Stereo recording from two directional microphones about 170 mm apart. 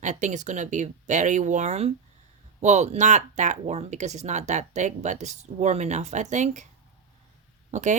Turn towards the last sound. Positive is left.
turn(degrees=-45)  # may be behind; listen again after turning